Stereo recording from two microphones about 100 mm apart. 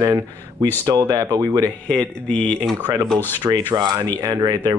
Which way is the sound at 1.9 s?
10° left (ahead or behind).